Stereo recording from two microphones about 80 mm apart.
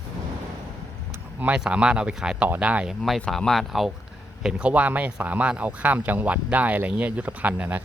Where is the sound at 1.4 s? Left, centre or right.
Centre.